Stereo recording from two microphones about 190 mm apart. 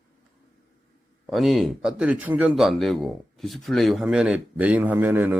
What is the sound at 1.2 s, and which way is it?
A man's voice, centre (ahead or behind).